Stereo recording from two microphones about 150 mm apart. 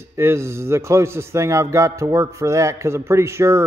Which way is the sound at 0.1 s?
20° right (ahead or behind).